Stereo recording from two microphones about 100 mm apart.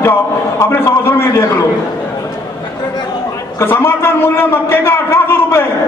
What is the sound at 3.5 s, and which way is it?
A man's voice, 25° left (ahead or behind).